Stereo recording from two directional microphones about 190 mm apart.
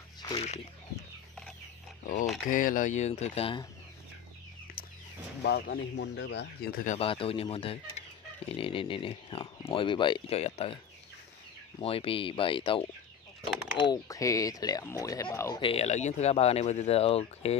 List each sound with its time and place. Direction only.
0.2 s speech: 30° left (ahead or behind)
2.5 s speech: 45° left (ahead or behind)
4.8 s chicken: 50° left (ahead or behind)
5.4 s speech: 60° left (ahead or behind)
7.0 s speech: 30° left (ahead or behind)
11.8 s speech: 30° left (ahead or behind)
15.6 s speech: 30° left (ahead or behind)